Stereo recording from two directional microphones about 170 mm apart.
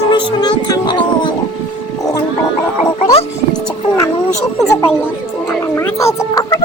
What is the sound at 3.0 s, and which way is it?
Speech, 35° left (ahead or behind).